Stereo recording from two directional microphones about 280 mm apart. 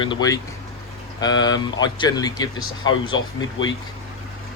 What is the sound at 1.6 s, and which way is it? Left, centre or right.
Speech, centre.